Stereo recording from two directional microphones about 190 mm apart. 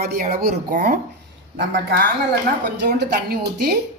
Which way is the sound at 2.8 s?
60° right (ahead or behind).